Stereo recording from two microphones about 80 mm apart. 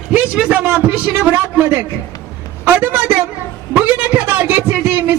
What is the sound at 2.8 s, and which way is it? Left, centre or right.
A man's voice, right.